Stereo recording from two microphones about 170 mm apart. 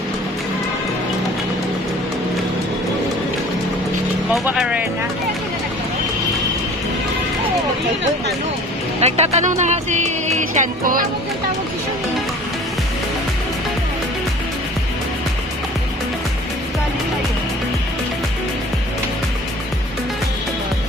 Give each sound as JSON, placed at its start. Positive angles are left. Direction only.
{"t": 4.3, "sound": "speech", "side_deg": -5}
{"t": 9.0, "sound": "speech", "side_deg": -40}